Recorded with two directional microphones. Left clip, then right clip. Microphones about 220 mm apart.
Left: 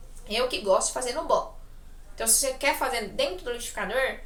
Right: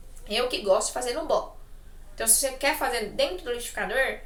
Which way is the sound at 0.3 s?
5° right (ahead or behind).